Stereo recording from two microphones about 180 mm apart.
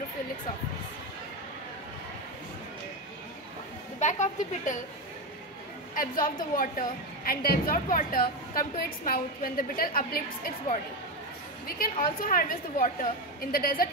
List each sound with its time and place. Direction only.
4.0 s speech: 40° left (ahead or behind)
5.9 s a woman's voice: 50° left (ahead or behind)
11.6 s a woman's voice: 55° left (ahead or behind)